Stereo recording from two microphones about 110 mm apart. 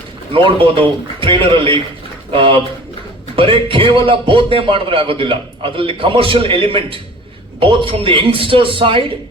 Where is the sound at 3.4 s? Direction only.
55° right (ahead or behind).